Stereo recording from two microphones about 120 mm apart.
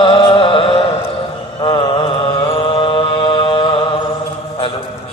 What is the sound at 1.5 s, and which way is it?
Mantra, 45° left (ahead or behind).